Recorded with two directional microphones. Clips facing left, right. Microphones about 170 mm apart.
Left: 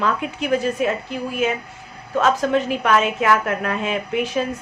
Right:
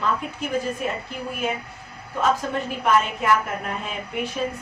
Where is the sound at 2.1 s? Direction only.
85° left.